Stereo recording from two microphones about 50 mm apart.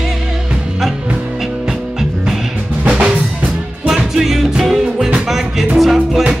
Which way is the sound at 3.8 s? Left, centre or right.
Centre.